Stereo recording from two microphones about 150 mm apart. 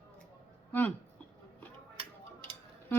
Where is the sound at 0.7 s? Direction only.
10° left (ahead or behind).